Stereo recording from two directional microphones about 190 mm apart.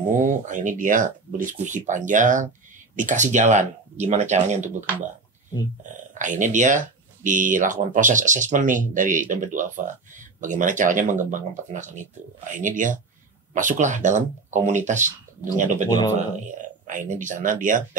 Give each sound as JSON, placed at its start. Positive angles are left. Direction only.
{"t": 0.2, "sound": "speech", "side_deg": -40}
{"t": 6.1, "sound": "speech", "side_deg": -40}